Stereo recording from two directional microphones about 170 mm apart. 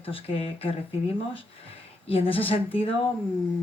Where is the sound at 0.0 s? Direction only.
35° left (ahead or behind).